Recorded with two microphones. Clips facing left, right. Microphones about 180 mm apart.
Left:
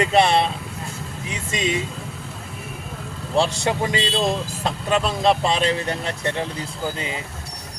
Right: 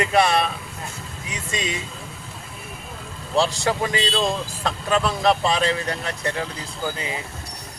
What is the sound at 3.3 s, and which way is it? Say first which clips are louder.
Speech: even; 25° left (ahead or behind).